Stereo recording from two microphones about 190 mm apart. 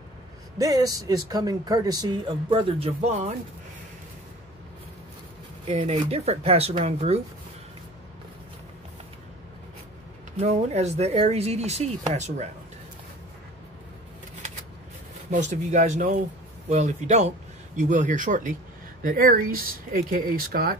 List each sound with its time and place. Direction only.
0.6 s speech: 20° right (ahead or behind); by 3.3 s 35° right (ahead or behind)
5.7 s speech: 35° right (ahead or behind)
10.3 s speech: 35° right (ahead or behind)
15.3 s speech: 40° right (ahead or behind)